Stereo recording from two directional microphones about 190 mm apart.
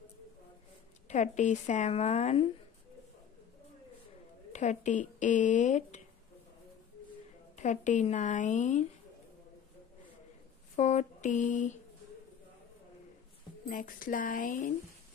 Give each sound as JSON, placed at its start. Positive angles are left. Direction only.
{"t": 1.0, "sound": "speech", "side_deg": 40}
{"t": 4.5, "sound": "speech", "side_deg": 40}
{"t": 7.5, "sound": "speech", "side_deg": 40}
{"t": 10.8, "sound": "speech", "side_deg": 40}
{"t": 13.7, "sound": "speech", "side_deg": 45}